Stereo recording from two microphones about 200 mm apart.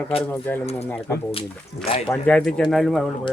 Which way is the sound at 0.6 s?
30° left (ahead or behind).